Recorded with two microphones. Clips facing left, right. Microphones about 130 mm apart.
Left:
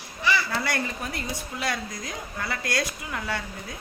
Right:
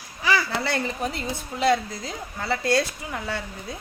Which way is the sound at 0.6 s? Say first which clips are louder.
Right 3 dB; 25° right (ahead or behind).